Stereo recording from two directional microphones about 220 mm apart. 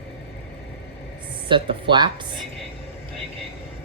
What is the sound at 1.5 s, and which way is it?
Speech, 20° right (ahead or behind).